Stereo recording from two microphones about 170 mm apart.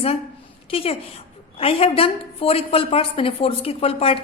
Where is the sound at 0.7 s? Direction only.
35° left (ahead or behind).